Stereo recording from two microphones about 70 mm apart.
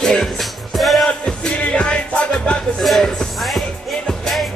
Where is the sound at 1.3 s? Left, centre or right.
Centre.